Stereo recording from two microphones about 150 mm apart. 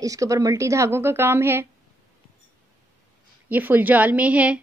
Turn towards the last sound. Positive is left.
turn(degrees=-10)  # may be behind; listen again after turning